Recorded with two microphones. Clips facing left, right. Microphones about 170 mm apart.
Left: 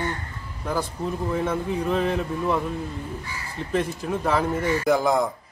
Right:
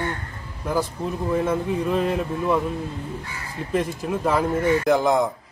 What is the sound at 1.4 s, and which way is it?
Speech, 10° right (ahead or behind).